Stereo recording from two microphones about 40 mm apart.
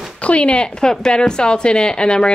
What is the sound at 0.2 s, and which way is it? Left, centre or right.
Speech, left.